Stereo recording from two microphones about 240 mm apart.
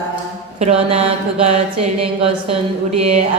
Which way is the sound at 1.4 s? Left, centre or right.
Right.